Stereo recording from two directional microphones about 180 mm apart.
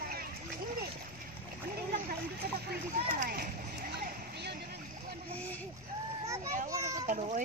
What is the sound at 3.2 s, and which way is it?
Speech, 55° right (ahead or behind).